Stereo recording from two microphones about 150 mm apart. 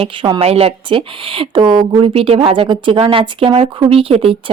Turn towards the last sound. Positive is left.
turn(degrees=-35)  # may be behind; listen again after turning